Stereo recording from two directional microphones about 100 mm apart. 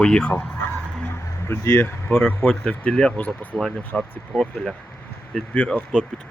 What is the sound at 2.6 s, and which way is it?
Speech, 10° left (ahead or behind).